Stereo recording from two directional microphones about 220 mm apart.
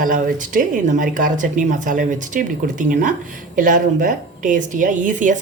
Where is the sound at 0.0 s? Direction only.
35° right (ahead or behind).